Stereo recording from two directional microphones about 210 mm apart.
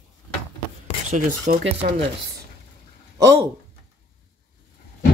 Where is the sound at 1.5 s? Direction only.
35° right (ahead or behind).